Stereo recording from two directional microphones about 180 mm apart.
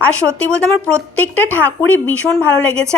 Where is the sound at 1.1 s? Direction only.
10° left (ahead or behind).